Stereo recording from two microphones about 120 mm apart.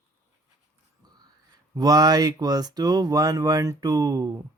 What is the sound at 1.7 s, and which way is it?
Speech, 30° right (ahead or behind).